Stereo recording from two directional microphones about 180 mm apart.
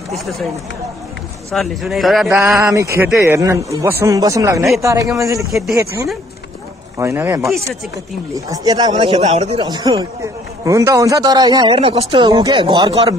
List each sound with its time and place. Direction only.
0.1 s speech: centre (ahead or behind)
1.5 s speech: centre (ahead or behind)
2.6 s speech: 15° right (ahead or behind)
5.5 s speech: centre (ahead or behind)
7.0 s a man's voice: 15° right (ahead or behind)
9.1 s speech: 40° right (ahead or behind)
9.6 s a man's voice: 20° right (ahead or behind)